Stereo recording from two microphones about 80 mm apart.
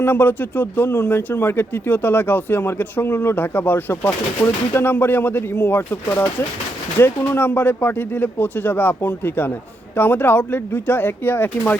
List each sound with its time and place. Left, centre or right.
0.0 s speech: left